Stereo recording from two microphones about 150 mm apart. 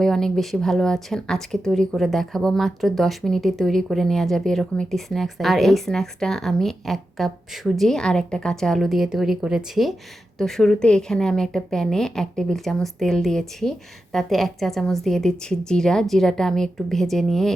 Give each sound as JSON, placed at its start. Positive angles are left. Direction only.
{"t": 0.0, "sound": "speech", "side_deg": 0}